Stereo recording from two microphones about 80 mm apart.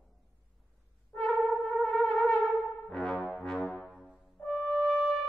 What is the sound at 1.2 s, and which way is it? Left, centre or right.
Brass instrument, centre.